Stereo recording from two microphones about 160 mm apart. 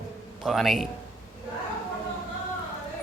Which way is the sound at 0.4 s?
Centre (ahead or behind).